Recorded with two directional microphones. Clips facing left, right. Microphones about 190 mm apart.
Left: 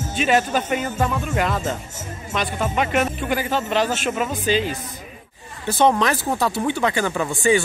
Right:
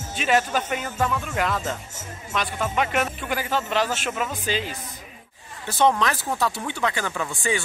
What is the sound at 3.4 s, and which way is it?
Speech, 20° left (ahead or behind).